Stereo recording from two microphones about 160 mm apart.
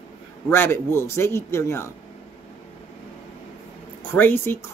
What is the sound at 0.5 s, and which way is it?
Speech, 15° left (ahead or behind).